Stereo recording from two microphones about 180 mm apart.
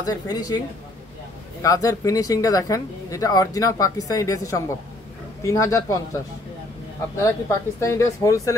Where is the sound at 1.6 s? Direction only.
20° left (ahead or behind).